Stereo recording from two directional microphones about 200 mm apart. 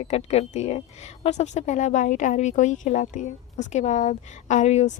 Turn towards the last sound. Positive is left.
turn(degrees=35)  # may be behind; listen again after turning